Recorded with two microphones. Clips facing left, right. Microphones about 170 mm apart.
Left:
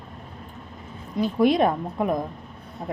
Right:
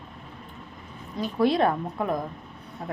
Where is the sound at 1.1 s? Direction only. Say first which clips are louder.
Left 3 dB; 15° left (ahead or behind).